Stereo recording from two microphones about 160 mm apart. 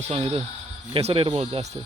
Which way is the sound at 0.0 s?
35° right (ahead or behind).